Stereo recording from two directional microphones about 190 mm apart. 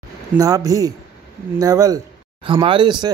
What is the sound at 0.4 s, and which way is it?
Speech, 20° right (ahead or behind).